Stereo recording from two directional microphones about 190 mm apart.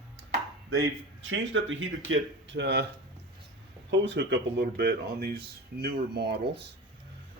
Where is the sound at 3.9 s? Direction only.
70° right (ahead or behind).